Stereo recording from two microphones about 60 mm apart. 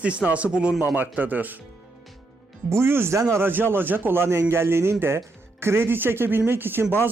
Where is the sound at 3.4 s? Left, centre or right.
Right.